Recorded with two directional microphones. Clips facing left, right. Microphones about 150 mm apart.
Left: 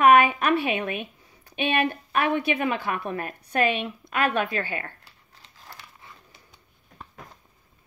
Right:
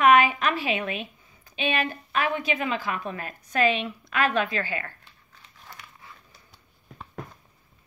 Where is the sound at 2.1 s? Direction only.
60° left (ahead or behind).